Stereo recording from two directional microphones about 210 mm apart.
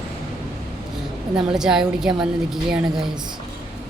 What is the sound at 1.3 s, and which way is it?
Speech, 25° right (ahead or behind).